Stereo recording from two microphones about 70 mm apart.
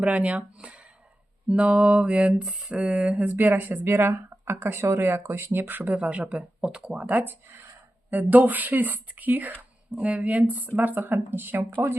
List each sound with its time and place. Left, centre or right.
0.0 s a woman's voice: centre
1.5 s music: centre
2.7 s a woman's voice: centre
6.3 s speech: centre
6.7 s a woman's voice: centre